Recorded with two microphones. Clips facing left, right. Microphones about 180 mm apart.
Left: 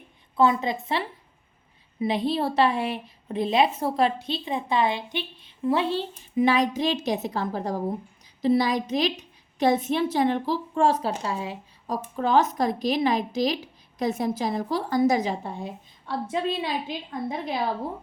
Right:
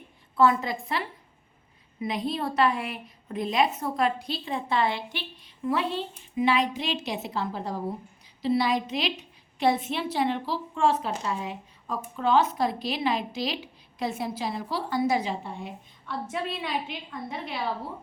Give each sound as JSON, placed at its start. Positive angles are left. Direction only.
{"t": 0.3, "sound": "a woman's voice", "side_deg": 20}
{"t": 12.1, "sound": "a woman's voice", "side_deg": 40}